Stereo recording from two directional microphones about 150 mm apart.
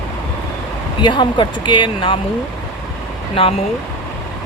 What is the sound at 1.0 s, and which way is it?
Speech, 30° left (ahead or behind).